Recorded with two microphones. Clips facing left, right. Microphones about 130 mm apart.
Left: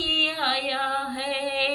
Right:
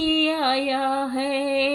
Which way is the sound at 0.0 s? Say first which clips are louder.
Right 8 dB; 40° right (ahead or behind).